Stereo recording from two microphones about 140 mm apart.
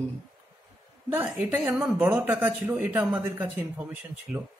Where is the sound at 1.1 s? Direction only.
15° right (ahead or behind).